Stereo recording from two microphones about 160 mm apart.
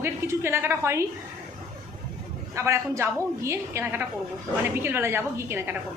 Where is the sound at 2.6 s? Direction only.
20° right (ahead or behind).